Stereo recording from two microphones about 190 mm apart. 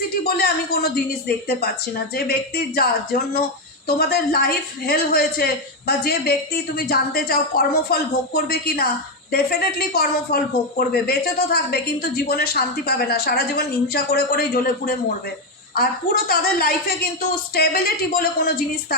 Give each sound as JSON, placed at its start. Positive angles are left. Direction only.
{"t": 0.3, "sound": "speech", "side_deg": 55}
{"t": 2.1, "sound": "a woman's voice", "side_deg": 55}